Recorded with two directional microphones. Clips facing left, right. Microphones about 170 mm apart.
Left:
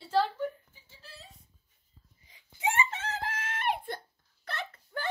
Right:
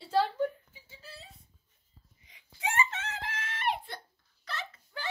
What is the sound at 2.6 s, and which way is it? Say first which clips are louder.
Wail: left 1 dB; 30° left (ahead or behind).